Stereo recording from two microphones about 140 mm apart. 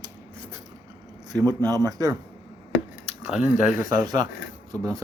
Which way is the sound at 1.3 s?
30° right (ahead or behind).